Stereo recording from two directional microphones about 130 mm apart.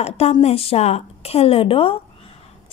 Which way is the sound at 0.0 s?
55° left (ahead or behind).